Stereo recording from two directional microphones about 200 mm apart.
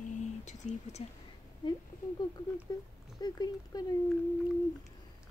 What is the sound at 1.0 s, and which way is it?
Speech, 30° left (ahead or behind).